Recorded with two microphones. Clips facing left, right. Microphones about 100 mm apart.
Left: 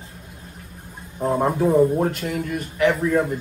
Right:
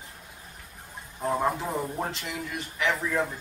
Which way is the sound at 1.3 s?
10° left (ahead or behind).